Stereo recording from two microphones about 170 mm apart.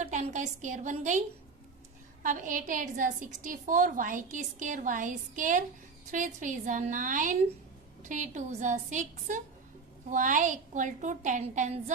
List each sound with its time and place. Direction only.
0.0 s a woman's voice: 45° right (ahead or behind)
2.2 s a woman's voice: 50° right (ahead or behind)